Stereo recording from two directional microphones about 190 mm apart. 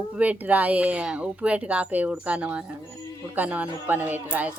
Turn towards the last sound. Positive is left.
turn(degrees=-10)  # may be behind; listen again after turning